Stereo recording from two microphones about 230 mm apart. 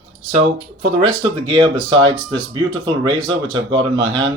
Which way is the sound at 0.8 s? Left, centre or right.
Right.